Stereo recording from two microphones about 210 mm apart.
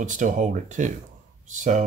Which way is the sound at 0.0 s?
35° right (ahead or behind).